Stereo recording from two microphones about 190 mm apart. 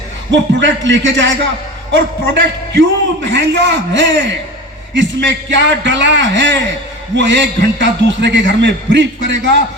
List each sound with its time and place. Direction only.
0.3 s a man's voice: 75° right (ahead or behind)